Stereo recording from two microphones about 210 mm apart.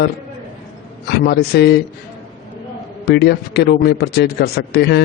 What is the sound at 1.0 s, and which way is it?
Speech, 50° left (ahead or behind).